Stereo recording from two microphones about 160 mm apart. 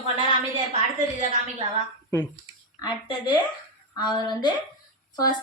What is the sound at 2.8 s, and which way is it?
A woman's voice, 30° left (ahead or behind).